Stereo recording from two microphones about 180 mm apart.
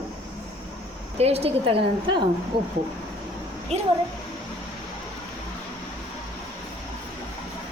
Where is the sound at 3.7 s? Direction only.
35° right (ahead or behind).